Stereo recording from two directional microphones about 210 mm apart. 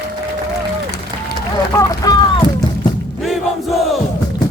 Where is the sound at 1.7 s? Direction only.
15° left (ahead or behind).